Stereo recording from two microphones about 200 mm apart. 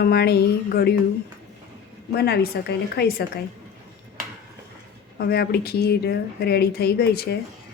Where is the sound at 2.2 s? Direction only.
50° left (ahead or behind).